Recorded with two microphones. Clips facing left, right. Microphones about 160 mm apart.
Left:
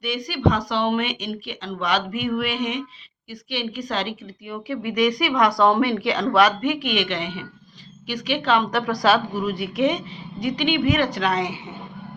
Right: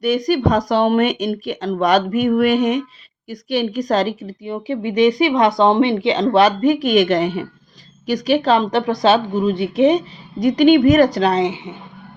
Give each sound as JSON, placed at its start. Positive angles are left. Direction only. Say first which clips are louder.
{"t": 0.0, "sound": "speech", "louder": "right 6 dB", "side_deg": -45}
{"t": 4.4, "sound": "speech", "louder": "right 5 dB", "side_deg": -30}
{"t": 10.4, "sound": "a woman's voice", "louder": "right 10 dB", "side_deg": -45}